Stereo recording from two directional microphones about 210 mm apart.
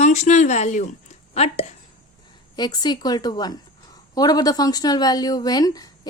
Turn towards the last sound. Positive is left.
turn(degrees=20)  # may be behind; listen again after turning